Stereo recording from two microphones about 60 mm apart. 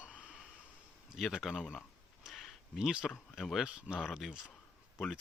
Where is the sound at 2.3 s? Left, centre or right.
Centre.